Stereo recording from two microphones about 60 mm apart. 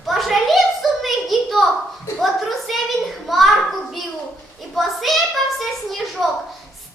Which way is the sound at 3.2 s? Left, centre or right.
Centre.